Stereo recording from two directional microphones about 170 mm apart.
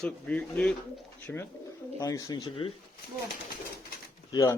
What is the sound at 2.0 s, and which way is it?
Speech, 20° left (ahead or behind).